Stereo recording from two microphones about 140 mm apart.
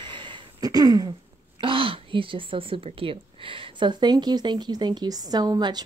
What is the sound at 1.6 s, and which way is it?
Speech, 40° right (ahead or behind).